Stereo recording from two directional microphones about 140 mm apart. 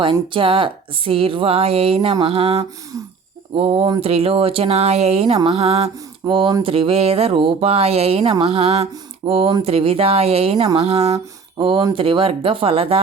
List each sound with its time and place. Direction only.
0.0 s speech: 40° right (ahead or behind)
11.5 s speech: 35° right (ahead or behind)